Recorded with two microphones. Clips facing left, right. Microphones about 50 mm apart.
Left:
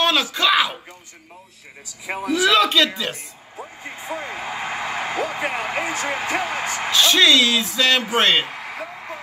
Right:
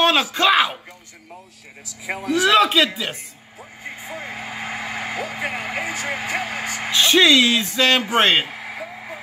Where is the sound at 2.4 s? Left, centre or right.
Centre.